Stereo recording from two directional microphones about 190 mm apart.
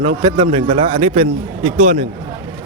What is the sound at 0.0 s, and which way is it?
A man's voice, 25° right (ahead or behind).